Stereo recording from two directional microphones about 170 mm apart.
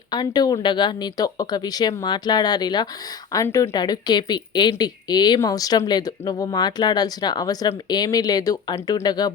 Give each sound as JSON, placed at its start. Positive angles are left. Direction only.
{"t": 0.1, "sound": "speech", "side_deg": 25}